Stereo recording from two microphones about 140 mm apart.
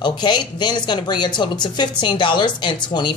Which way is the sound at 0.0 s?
30° left (ahead or behind).